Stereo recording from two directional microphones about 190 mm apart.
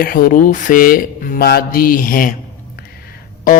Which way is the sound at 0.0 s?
50° left (ahead or behind).